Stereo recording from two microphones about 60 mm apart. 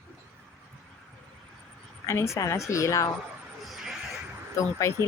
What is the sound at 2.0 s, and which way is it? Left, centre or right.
A woman's voice, left.